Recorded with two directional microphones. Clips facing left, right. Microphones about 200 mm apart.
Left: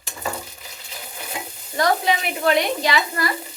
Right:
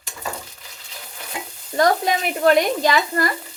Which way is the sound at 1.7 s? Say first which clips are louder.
Right 2 dB; 45° right (ahead or behind).